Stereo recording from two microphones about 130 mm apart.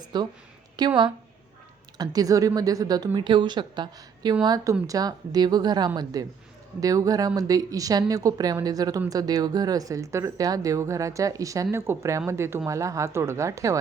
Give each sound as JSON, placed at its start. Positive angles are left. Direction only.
{"t": 0.0, "sound": "a woman's voice", "side_deg": -35}